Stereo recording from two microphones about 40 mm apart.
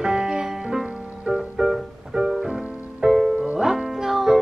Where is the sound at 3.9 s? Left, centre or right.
Centre.